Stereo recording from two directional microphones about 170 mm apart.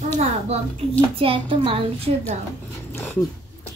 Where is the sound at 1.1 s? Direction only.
30° right (ahead or behind).